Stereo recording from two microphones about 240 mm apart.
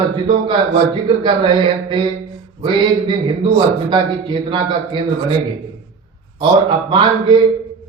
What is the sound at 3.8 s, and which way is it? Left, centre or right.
A man's voice, centre.